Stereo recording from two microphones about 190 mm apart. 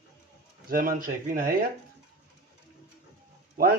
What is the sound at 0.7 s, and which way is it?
Speech, 50° right (ahead or behind).